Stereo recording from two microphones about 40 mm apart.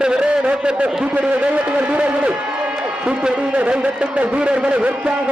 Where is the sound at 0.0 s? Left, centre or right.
Right.